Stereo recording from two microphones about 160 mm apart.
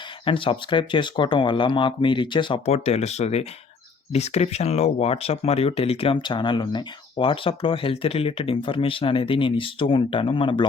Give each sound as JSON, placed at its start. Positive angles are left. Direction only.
{"t": 0.3, "sound": "speech", "side_deg": 30}